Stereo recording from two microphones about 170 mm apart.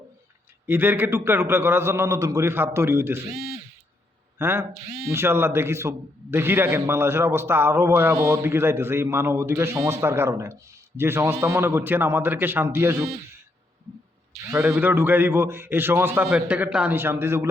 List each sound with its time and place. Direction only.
0.7 s a man's voice: 10° right (ahead or behind)
4.4 s a man's voice: 15° right (ahead or behind)
14.5 s a man's voice: 15° right (ahead or behind)